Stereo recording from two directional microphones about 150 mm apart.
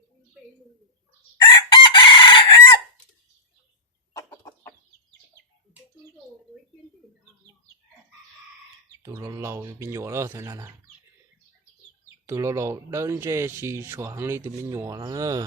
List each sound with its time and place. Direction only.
1.5 s chicken: 30° left (ahead or behind)
4.2 s chicken: 20° left (ahead or behind)
9.0 s speech: 20° right (ahead or behind)
12.2 s speech: 20° right (ahead or behind)